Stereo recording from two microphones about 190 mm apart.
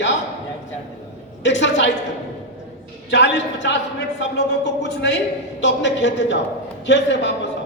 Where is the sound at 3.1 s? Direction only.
70° left (ahead or behind).